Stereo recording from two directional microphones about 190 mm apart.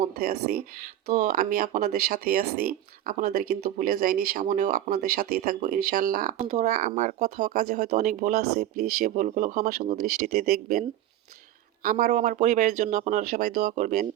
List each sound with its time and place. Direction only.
0.2 s speech: 55° right (ahead or behind)
4.9 s speech: 50° right (ahead or behind)